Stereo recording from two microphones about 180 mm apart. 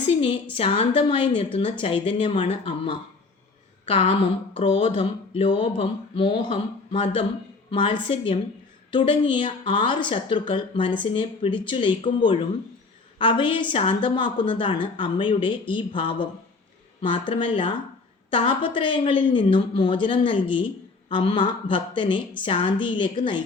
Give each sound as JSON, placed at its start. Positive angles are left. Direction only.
{"t": 0.2, "sound": "a woman's voice", "side_deg": 30}